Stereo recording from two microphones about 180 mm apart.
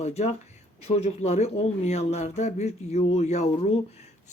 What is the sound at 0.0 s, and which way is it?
Speech, 35° left (ahead or behind).